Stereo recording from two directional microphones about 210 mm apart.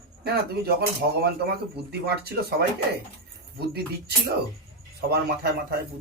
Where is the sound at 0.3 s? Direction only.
50° right (ahead or behind).